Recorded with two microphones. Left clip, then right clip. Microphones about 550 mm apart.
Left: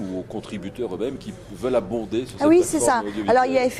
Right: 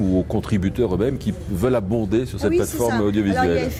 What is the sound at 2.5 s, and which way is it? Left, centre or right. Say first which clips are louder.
A woman's voice: left 4 dB; left.